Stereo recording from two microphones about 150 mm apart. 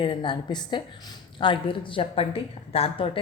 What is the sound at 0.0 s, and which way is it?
A woman's voice, 30° left (ahead or behind).